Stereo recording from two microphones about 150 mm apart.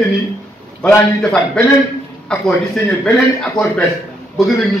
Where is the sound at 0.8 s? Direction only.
5° left (ahead or behind).